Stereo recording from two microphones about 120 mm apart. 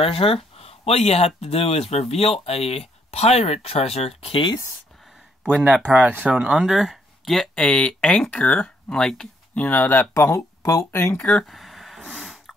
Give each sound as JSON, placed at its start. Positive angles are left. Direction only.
{"t": 0.0, "sound": "speech", "side_deg": 50}
{"t": 5.4, "sound": "speech", "side_deg": -10}
{"t": 9.7, "sound": "speech", "side_deg": 15}
{"t": 10.1, "sound": "speech", "side_deg": 25}
{"t": 11.1, "sound": "a sound", "side_deg": 10}